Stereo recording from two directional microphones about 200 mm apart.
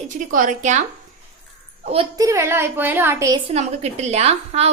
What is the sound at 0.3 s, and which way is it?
Speech, 40° right (ahead or behind).